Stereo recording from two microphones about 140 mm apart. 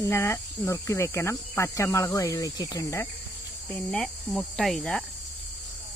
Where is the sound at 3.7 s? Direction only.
5° left (ahead or behind).